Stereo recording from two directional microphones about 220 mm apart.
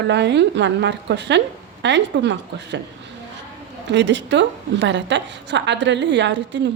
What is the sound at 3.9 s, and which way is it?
A woman's voice, 55° right (ahead or behind).